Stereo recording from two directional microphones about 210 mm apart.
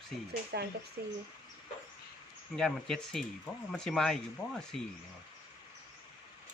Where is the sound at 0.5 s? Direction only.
50° right (ahead or behind).